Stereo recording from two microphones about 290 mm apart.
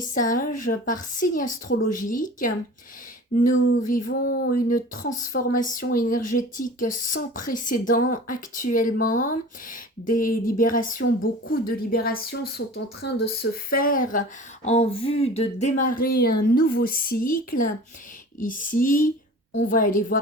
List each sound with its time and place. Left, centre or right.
0.0 s speech: left
4.0 s speech: left